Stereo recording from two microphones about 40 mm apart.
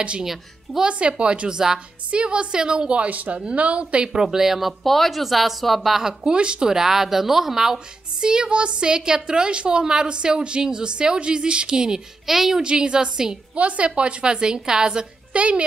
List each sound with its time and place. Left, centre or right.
0.2 s speech: centre
0.8 s a woman's voice: right
3.1 s a woman's voice: right
4.1 s speech: centre
6.2 s a woman's voice: right
6.7 s a woman's voice: centre
12.3 s speech: centre
12.6 s a woman's voice: right
13.6 s a woman's voice: right
15.3 s a child's voice: right